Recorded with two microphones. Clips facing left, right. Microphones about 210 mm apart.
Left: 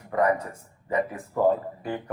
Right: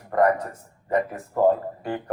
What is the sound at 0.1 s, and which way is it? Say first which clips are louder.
A man's voice: right 3 dB; 50° right (ahead or behind).